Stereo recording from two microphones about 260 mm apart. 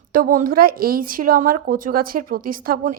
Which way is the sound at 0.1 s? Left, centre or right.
Right.